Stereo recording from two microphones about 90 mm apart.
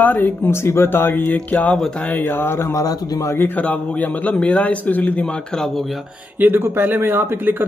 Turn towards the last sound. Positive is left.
turn(degrees=-25)  # may be behind; listen again after turning